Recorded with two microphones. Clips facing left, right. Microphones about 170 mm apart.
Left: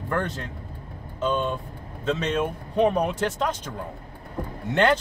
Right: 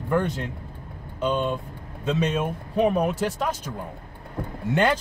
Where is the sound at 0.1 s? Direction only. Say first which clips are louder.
Right 4 dB; 10° right (ahead or behind).